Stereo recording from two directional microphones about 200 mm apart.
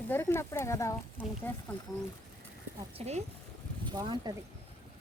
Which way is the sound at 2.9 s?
30° right (ahead or behind).